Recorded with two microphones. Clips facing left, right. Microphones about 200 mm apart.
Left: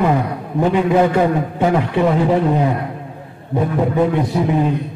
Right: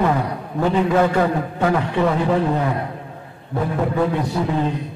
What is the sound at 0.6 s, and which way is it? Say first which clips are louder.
A man's voice: left 3 dB; 15° left (ahead or behind).